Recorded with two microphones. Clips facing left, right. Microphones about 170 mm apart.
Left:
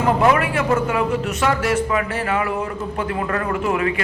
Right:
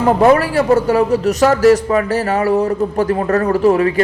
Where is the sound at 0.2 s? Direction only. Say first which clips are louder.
Right 6 dB; 35° right (ahead or behind).